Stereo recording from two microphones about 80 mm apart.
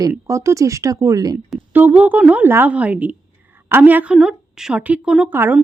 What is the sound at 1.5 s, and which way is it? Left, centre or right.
A woman's voice, right.